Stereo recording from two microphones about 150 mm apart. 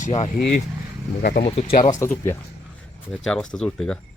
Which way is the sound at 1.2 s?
80° left.